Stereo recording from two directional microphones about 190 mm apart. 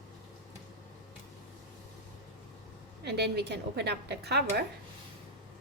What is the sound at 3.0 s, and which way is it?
A woman's voice, 60° right (ahead or behind).